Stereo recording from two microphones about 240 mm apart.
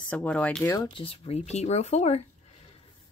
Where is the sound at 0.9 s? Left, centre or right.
Left.